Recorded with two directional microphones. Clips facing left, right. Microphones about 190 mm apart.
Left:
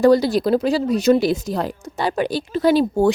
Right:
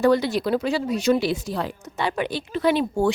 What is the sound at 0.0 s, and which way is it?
Speech, 35° left (ahead or behind).